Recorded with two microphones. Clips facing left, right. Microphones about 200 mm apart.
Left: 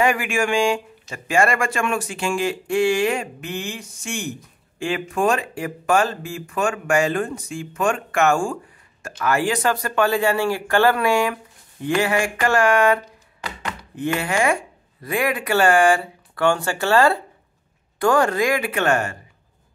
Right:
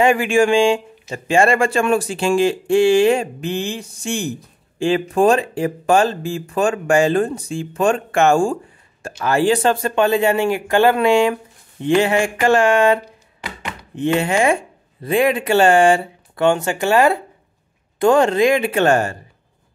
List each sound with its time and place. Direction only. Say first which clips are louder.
0.0 s speech: right 6 dB; 25° right (ahead or behind)